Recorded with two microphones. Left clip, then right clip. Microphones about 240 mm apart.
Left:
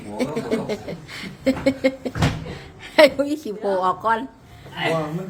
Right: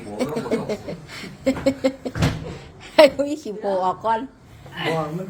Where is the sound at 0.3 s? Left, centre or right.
Centre.